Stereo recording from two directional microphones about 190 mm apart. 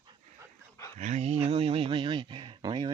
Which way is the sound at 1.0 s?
35° right (ahead or behind).